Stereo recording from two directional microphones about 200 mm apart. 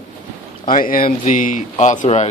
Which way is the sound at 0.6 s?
45° left (ahead or behind).